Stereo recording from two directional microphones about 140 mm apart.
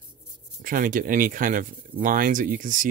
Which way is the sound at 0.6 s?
80° right.